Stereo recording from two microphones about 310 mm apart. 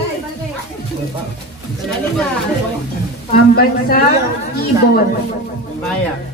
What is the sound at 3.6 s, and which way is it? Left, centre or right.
Speech, left.